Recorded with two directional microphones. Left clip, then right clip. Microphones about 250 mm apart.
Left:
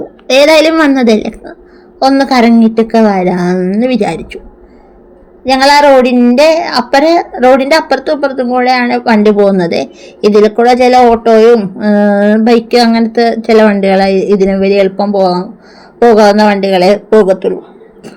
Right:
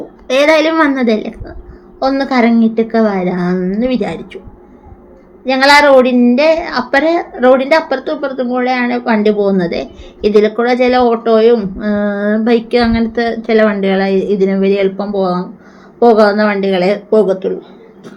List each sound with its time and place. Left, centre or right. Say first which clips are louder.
0.3 s a woman's voice: left 5 dB; left
5.5 s a woman's voice: left 2 dB; left